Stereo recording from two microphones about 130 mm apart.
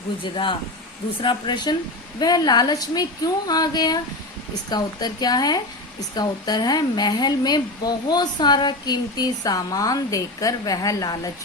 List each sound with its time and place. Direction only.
0.2 s speech: 40° left (ahead or behind)